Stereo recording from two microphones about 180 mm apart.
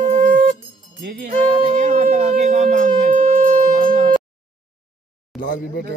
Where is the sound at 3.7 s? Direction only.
30° right (ahead or behind).